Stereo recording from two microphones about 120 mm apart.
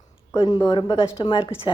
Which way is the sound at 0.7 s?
40° left (ahead or behind).